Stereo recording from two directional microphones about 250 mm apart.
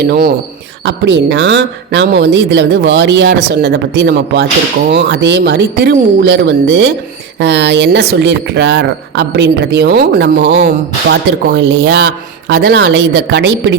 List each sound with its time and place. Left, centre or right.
0.1 s speech: right